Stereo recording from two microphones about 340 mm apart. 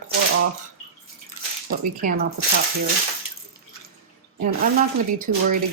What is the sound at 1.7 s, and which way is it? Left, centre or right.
Speech, right.